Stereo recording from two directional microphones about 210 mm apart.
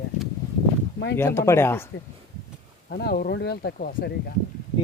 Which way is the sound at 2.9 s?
45° left (ahead or behind).